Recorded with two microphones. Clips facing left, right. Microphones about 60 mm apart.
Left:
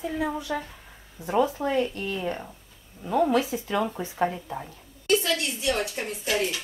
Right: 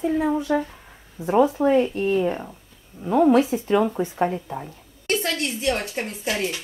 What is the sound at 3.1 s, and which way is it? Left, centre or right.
Speech, right.